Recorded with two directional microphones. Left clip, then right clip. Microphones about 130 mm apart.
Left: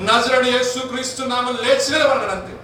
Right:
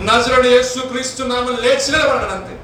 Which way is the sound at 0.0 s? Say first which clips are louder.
Right 3 dB; 25° right (ahead or behind).